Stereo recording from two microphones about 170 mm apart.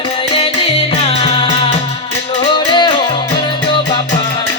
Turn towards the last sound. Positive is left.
turn(degrees=30)  # may be behind; listen again after turning